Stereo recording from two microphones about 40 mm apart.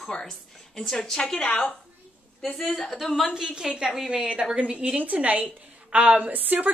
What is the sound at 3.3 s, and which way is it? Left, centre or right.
A woman's voice, centre.